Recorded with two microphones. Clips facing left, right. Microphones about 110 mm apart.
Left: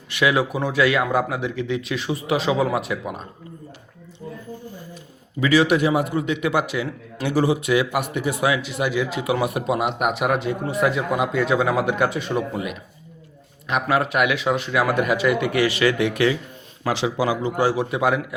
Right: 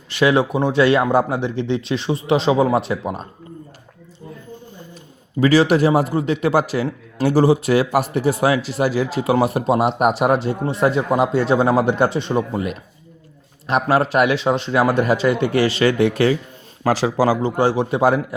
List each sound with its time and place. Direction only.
0.1 s speech: 30° right (ahead or behind)
5.4 s a man's voice: 35° right (ahead or behind)